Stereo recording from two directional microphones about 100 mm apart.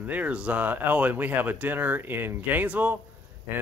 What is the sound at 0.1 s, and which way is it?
Speech, 15° right (ahead or behind).